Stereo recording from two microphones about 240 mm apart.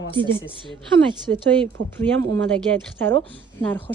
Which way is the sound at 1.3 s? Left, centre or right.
Right.